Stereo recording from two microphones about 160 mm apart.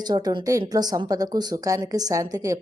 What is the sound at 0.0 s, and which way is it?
Speech, 25° right (ahead or behind).